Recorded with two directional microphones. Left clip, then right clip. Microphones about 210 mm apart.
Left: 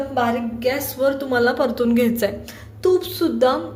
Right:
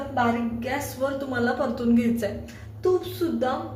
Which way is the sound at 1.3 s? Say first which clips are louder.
Left 8 dB; 40° left (ahead or behind).